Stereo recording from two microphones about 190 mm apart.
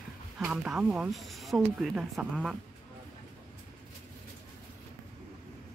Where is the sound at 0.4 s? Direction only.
5° right (ahead or behind).